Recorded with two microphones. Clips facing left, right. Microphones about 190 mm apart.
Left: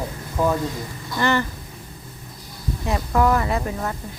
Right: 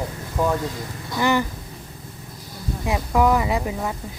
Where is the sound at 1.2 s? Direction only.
10° right (ahead or behind).